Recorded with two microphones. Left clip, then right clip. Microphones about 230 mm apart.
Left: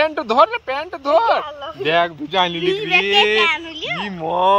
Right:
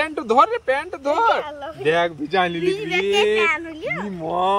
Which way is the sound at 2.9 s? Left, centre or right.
Centre.